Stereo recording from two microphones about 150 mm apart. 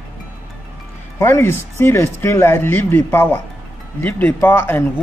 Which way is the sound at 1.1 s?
15° left (ahead or behind).